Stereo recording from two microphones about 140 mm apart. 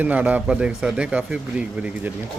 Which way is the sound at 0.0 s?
10° right (ahead or behind).